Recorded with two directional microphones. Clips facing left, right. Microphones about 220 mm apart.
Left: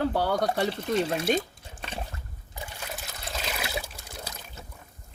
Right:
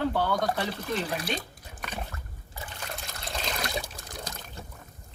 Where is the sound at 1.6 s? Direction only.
30° left (ahead or behind).